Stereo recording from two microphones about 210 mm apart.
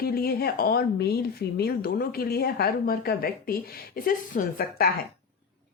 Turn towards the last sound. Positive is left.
turn(degrees=40)  # may be behind; listen again after turning